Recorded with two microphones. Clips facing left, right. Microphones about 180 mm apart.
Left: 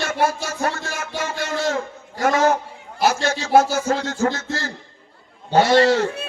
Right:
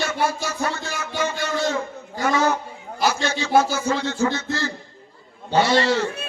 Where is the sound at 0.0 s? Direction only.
45° left (ahead or behind).